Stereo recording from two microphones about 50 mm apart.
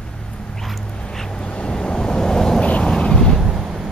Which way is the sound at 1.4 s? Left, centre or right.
Centre.